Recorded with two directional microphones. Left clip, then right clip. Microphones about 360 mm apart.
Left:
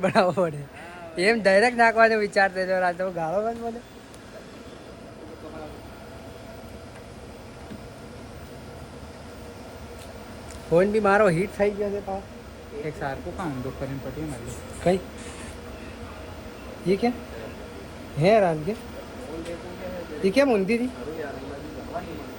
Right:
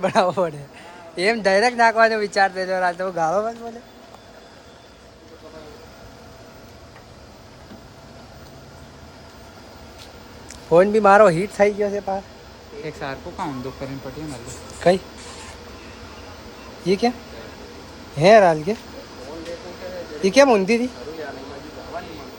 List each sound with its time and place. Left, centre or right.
0.0 s speech: centre
10.7 s speech: centre
12.8 s speech: right
16.8 s speech: centre
18.2 s speech: centre
20.2 s speech: centre